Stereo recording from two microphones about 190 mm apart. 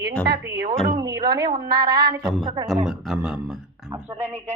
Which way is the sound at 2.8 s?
Centre (ahead or behind).